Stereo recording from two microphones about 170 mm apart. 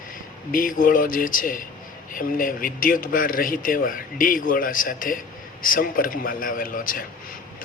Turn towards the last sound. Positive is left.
turn(degrees=55)  # may be behind; listen again after turning